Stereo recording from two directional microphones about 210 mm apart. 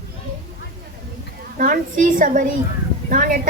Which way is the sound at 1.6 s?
40° right (ahead or behind).